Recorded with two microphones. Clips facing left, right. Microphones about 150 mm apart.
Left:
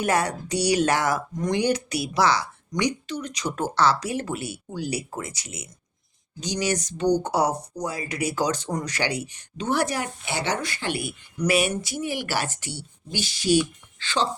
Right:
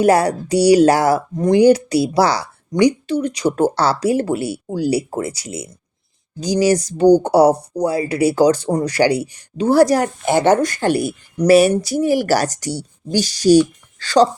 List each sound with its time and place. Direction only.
0.0 s speech: 35° right (ahead or behind)